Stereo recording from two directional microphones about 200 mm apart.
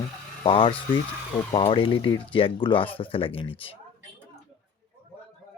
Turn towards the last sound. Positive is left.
turn(degrees=25)  # may be behind; listen again after turning